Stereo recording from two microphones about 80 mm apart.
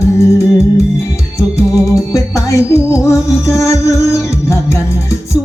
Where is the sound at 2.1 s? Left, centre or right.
Left.